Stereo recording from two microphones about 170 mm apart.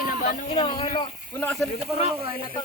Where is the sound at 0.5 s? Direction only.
30° left (ahead or behind).